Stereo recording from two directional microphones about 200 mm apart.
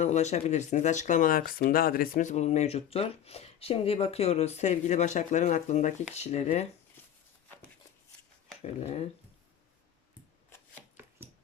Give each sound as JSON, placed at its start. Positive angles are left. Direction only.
{"t": 0.0, "sound": "speech", "side_deg": 35}
{"t": 8.6, "sound": "speech", "side_deg": 30}